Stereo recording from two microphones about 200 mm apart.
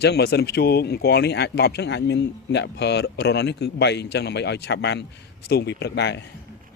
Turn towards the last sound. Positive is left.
turn(degrees=60)  # may be behind; listen again after turning